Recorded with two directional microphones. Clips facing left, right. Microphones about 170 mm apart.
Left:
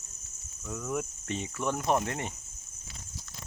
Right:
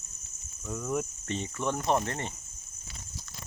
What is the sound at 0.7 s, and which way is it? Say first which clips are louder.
Cricket: right 2 dB; centre (ahead or behind).